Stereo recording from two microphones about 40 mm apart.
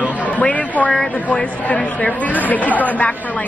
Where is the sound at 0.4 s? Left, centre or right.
Left.